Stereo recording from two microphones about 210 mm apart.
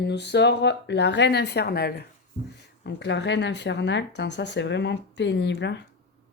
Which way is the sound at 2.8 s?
60° left (ahead or behind).